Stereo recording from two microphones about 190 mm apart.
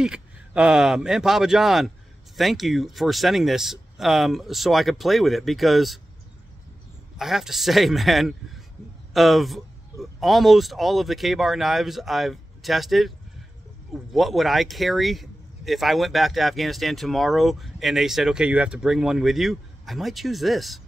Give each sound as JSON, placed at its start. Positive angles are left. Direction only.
{"t": 0.0, "sound": "speech", "side_deg": -5}
{"t": 7.2, "sound": "speech", "side_deg": 0}
{"t": 14.1, "sound": "speech", "side_deg": 0}